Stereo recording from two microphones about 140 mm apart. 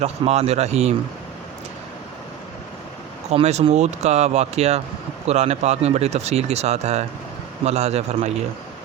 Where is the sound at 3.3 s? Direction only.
50° right (ahead or behind).